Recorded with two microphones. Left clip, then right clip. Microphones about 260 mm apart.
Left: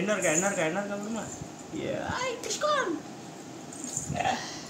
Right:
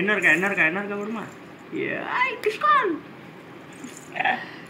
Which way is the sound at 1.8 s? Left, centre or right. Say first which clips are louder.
Right 8 dB; centre.